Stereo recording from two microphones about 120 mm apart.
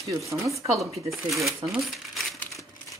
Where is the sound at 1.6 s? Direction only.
Centre (ahead or behind).